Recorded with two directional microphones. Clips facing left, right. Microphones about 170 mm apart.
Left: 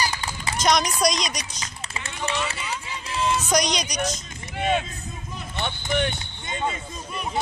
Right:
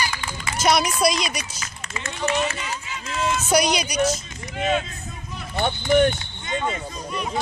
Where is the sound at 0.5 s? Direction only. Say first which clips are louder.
Right 2 dB; 5° right (ahead or behind).